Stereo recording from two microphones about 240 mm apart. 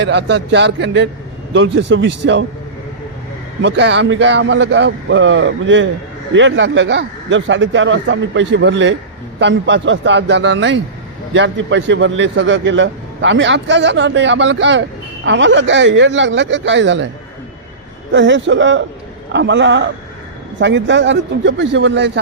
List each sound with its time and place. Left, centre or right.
0.0 s a man's voice: right
3.6 s a man's voice: right
18.1 s a man's voice: right